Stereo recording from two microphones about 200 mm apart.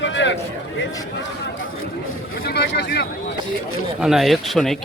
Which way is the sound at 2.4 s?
50° left (ahead or behind).